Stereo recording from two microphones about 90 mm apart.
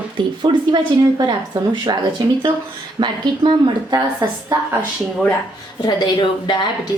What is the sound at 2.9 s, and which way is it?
Speech, 60° right (ahead or behind).